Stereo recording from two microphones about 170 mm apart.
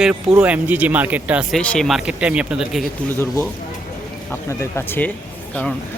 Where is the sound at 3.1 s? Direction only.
15° left (ahead or behind).